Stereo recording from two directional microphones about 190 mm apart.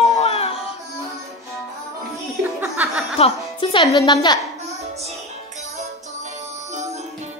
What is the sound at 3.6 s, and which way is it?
Speech, 25° left (ahead or behind).